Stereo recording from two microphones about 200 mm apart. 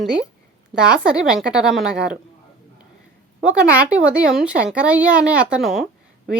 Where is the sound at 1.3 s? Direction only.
5° right (ahead or behind).